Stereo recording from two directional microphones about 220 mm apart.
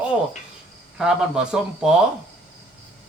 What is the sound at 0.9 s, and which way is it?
Speech, 5° right (ahead or behind).